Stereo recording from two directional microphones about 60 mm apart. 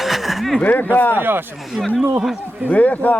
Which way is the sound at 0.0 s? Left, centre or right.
Centre.